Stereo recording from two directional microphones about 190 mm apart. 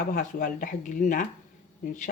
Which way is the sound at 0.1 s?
40° left (ahead or behind).